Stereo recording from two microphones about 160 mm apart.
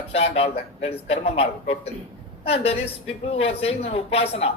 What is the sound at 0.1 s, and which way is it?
A woman's voice, 40° left (ahead or behind).